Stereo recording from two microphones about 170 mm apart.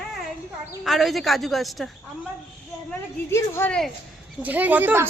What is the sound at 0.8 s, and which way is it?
Speech, centre (ahead or behind).